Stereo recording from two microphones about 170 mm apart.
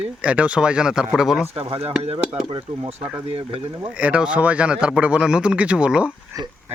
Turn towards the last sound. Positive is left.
turn(degrees=-5)  # may be behind; listen again after turning